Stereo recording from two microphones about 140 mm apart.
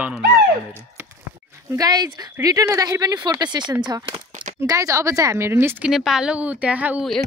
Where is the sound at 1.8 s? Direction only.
30° right (ahead or behind).